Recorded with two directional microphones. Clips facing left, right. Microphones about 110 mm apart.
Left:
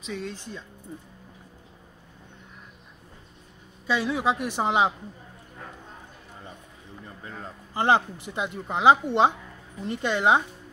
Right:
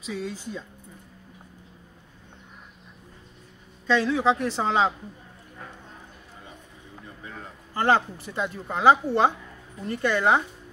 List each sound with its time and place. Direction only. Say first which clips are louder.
0.0 s speech: right 2 dB; 5° right (ahead or behind)
3.8 s a woman's voice: right 3 dB; 10° left (ahead or behind)
7.7 s speech: even; 15° left (ahead or behind)